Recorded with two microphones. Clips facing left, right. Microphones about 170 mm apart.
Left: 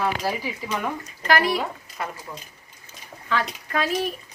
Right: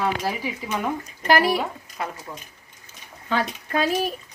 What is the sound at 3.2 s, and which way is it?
Speech, 30° right (ahead or behind).